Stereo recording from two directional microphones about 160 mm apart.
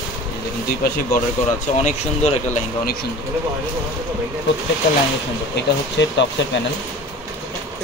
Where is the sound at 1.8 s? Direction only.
40° left (ahead or behind).